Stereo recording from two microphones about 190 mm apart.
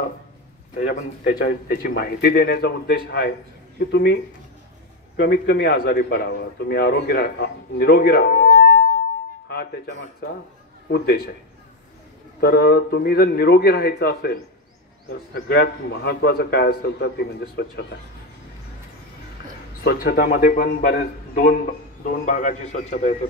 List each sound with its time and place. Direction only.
0.7 s a man's voice: 45° left (ahead or behind); by 10.3 s 65° left (ahead or behind)
12.4 s a man's voice: 55° left (ahead or behind)
19.8 s a man's voice: 55° left (ahead or behind); by 23.1 s 40° left (ahead or behind)